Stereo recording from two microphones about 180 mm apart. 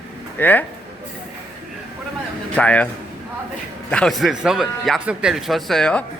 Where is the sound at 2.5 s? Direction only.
5° left (ahead or behind).